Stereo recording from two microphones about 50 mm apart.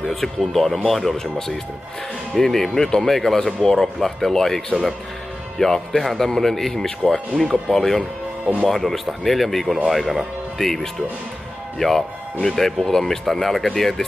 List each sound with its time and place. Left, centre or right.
0.0 s a man's voice: centre
2.3 s a man's voice: centre
7.4 s speech: right
7.7 s a man's voice: centre